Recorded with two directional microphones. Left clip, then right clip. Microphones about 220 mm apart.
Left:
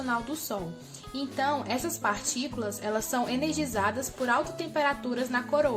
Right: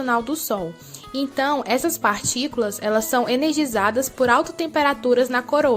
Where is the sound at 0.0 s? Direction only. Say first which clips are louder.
Right 9 dB; 45° right (ahead or behind).